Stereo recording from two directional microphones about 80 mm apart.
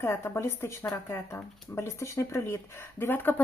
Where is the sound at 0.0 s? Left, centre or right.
Left.